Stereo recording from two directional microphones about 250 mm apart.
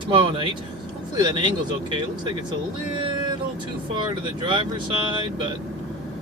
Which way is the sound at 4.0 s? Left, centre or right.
Centre.